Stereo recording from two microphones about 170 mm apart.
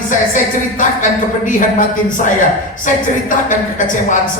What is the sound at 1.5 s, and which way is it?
A woman's voice, 50° left (ahead or behind).